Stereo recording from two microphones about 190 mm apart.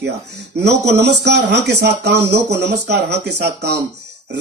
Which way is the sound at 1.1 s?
65° right (ahead or behind).